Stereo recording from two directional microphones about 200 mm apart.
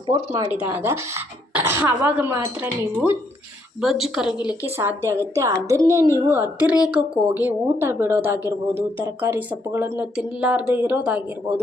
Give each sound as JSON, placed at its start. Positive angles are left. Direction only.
{"t": 0.5, "sound": "a woman's voice", "side_deg": -10}